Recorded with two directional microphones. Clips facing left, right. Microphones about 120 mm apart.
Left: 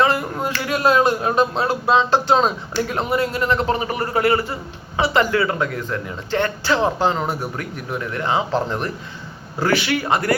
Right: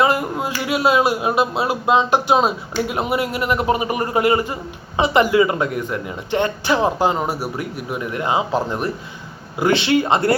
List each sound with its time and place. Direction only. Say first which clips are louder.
0.0 s speech: right 1 dB; 15° right (ahead or behind)
9.6 s speech: right 3 dB; 20° right (ahead or behind)